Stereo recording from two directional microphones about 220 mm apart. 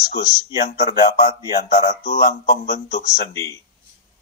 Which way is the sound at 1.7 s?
30° left (ahead or behind).